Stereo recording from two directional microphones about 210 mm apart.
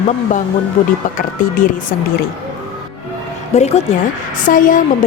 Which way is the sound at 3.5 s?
30° left (ahead or behind).